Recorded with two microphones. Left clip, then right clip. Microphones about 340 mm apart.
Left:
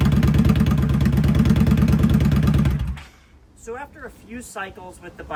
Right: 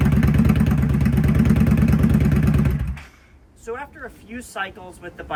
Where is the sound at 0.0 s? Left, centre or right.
Centre.